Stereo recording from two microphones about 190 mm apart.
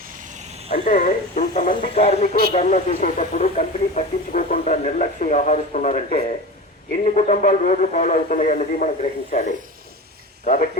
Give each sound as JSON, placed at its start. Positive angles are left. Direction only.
{"t": 0.1, "sound": "vehicle", "side_deg": -45}
{"t": 0.7, "sound": "speech", "side_deg": 40}